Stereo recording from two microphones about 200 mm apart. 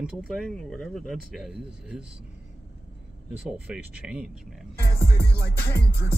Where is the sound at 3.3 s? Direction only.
5° right (ahead or behind).